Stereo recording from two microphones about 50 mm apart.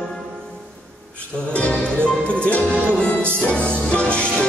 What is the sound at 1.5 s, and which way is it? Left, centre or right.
Music, left.